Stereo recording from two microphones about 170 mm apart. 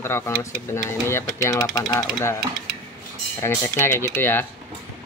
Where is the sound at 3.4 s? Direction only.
15° left (ahead or behind).